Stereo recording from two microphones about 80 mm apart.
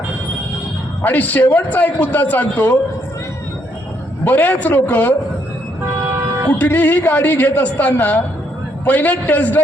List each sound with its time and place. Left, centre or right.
1.0 s a man's voice: left
4.2 s a man's voice: left
6.6 s a man's voice: left